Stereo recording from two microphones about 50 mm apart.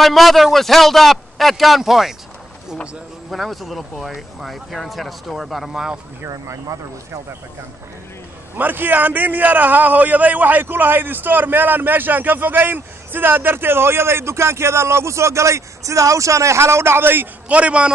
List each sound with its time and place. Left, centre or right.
0.0 s a man's voice: centre
3.3 s a man's voice: centre
6.2 s speech: right
8.5 s a man's voice: right
17.5 s a man's voice: right